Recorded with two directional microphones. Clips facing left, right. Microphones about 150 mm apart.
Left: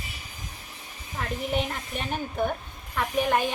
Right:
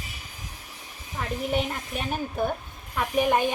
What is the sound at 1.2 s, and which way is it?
A woman's voice, 5° right (ahead or behind).